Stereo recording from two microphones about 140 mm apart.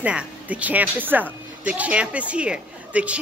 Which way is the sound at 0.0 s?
10° right (ahead or behind).